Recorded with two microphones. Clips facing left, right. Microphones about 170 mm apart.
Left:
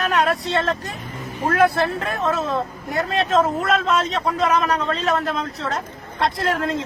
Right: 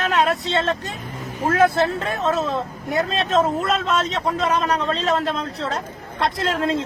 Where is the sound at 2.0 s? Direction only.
25° right (ahead or behind).